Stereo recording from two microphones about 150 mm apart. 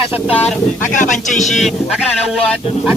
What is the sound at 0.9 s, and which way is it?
Speech, 55° left (ahead or behind).